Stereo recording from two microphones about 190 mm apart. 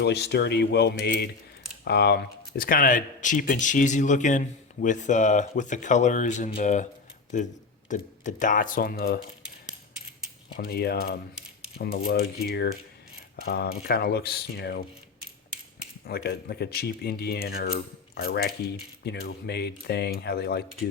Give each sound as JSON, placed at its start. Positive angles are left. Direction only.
{"t": 0.0, "sound": "speech", "side_deg": 60}
{"t": 10.6, "sound": "speech", "side_deg": 55}
{"t": 16.0, "sound": "speech", "side_deg": 55}